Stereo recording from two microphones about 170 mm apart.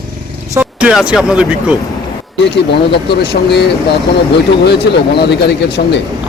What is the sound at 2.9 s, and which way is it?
Speech, 75° left (ahead or behind).